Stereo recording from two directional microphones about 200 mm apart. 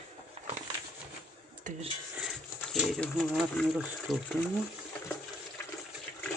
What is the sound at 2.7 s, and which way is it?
Speech, centre (ahead or behind).